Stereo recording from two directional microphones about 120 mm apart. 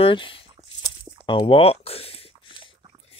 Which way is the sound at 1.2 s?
45° left (ahead or behind).